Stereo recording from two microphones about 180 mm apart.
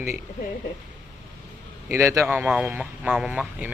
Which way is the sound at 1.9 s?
15° right (ahead or behind).